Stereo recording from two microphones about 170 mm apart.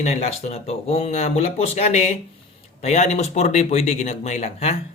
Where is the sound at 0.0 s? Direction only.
40° left (ahead or behind).